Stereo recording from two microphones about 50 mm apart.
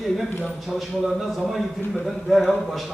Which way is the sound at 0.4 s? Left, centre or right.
Centre.